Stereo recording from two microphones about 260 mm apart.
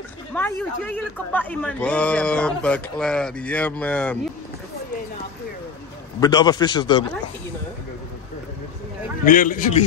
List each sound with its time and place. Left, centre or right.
0.3 s a man's voice: centre
6.2 s speech: centre
9.2 s a man's voice: left